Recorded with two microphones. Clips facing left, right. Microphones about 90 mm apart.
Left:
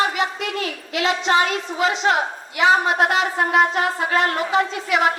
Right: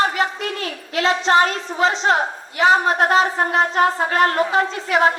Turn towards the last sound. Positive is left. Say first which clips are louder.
# right 2 dB
turn(degrees=-35)  # may be behind; listen again after turning